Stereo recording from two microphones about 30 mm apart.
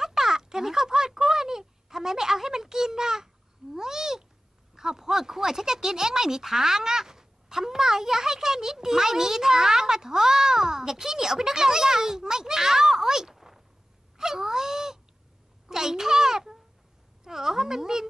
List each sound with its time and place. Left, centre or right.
0.0 s speech: centre
3.7 s cat: centre
4.7 s speech: centre